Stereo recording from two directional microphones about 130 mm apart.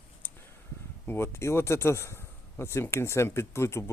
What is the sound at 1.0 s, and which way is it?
A man's voice, 20° left (ahead or behind).